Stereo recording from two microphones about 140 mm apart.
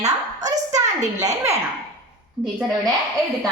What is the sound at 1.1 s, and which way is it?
Speech, 25° right (ahead or behind).